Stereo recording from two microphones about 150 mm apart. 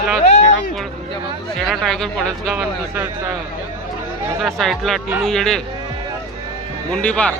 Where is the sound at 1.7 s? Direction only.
5° left (ahead or behind).